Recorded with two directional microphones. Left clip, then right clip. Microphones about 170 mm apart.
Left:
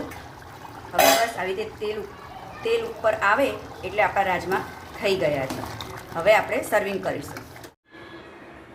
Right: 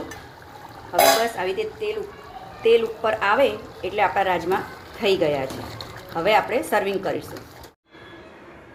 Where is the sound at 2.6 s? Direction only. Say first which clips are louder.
Right 5 dB; 35° right (ahead or behind).